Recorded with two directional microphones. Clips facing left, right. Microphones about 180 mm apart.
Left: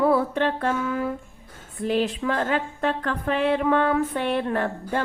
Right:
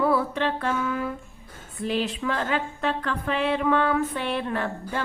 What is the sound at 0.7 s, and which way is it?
Female singing, 35° left (ahead or behind).